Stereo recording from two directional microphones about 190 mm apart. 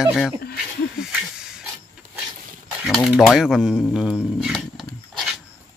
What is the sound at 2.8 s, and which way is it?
Speech, centre (ahead or behind).